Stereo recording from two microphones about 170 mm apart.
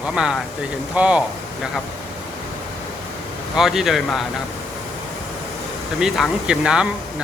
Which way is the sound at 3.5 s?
Centre (ahead or behind).